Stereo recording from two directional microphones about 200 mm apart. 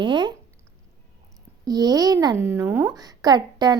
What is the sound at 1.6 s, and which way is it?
A woman's voice, 20° right (ahead or behind).